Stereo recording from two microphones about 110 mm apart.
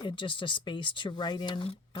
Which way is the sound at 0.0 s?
50° left (ahead or behind).